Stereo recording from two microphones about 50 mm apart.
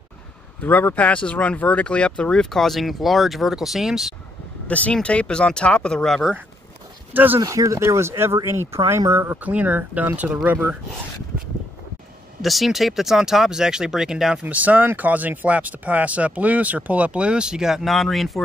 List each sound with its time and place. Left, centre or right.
0.6 s speech: left
2.5 s speech: centre
4.6 s speech: left
7.3 s speech: right
9.4 s speech: right
12.4 s speech: centre
14.4 s speech: right; by 17.8 s centre
17.8 s speech: centre